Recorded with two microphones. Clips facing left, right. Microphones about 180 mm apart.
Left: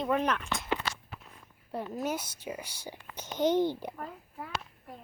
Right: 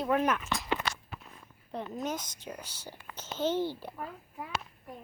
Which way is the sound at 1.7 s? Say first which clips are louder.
Left 2 dB; 5° left (ahead or behind).